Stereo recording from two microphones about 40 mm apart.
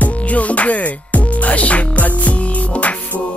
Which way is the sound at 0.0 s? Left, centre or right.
Left.